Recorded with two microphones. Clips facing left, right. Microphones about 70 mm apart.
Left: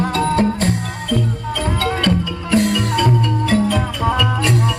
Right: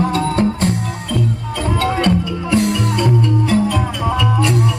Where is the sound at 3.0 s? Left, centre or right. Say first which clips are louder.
Right 1 dB; left.